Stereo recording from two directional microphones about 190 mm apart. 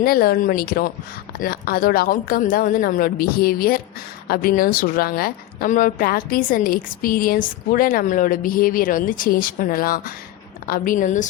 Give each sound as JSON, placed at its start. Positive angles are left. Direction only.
{"t": 0.0, "sound": "a woman's voice", "side_deg": 50}